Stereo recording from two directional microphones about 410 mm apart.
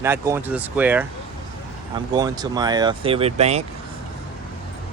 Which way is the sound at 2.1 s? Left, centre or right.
Centre.